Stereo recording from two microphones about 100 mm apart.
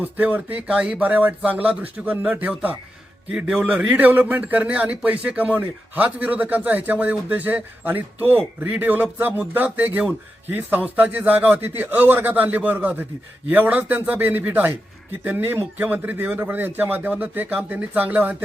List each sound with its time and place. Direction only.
0.0 s a man's voice: 15° right (ahead or behind)